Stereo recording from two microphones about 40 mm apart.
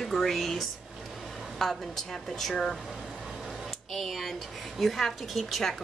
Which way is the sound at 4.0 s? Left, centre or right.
Centre.